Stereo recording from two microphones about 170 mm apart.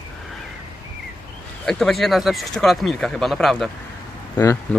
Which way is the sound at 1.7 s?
Centre (ahead or behind).